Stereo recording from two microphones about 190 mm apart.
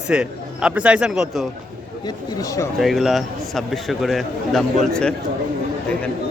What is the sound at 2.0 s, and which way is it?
Speech, 20° left (ahead or behind).